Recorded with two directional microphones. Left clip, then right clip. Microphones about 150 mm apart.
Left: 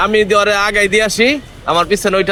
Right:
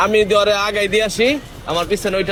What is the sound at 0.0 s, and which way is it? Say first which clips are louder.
A man's voice: left 2 dB; 45° left (ahead or behind).